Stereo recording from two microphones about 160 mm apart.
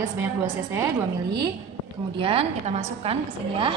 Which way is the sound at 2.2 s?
35° right (ahead or behind).